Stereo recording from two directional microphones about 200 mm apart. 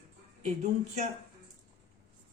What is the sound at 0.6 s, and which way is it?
Speech, 35° right (ahead or behind).